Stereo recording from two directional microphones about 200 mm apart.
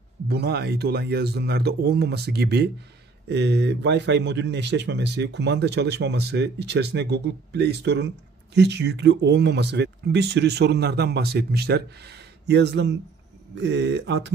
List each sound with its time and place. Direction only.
0.3 s a man's voice: 55° right (ahead or behind)